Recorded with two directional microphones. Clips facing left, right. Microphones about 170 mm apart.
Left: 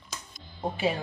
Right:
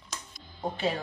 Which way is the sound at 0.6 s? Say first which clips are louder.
Left 2 dB; 10° left (ahead or behind).